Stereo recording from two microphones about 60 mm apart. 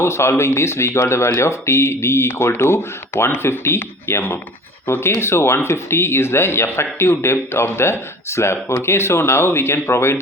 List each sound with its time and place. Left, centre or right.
0.0 s speech: left